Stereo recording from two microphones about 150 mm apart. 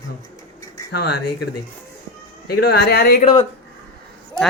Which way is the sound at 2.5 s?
90° left.